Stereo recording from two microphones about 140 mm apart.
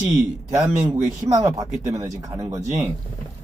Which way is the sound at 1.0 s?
25° right (ahead or behind).